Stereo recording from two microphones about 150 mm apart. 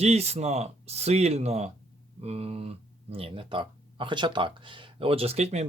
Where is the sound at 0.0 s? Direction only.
45° right (ahead or behind).